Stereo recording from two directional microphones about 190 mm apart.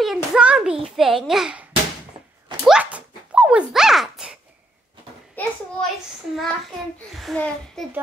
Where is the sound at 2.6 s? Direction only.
5° right (ahead or behind).